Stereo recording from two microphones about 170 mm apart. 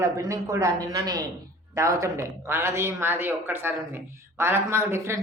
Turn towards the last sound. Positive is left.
turn(degrees=-15)  # may be behind; listen again after turning